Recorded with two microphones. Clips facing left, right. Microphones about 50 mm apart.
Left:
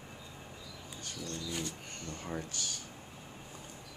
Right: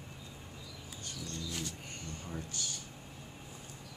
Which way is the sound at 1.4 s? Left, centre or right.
Centre.